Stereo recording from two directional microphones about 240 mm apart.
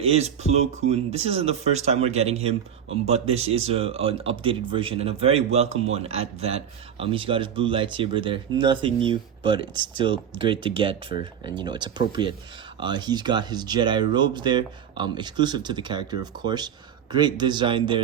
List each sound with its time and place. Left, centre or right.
0.0 s speech: right
9.7 s speech: right
10.0 s speech: right